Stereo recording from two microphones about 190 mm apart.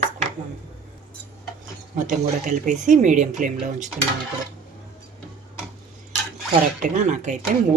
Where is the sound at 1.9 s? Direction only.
40° right (ahead or behind).